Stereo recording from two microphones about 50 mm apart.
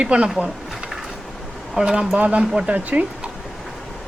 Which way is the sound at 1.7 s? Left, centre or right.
Centre.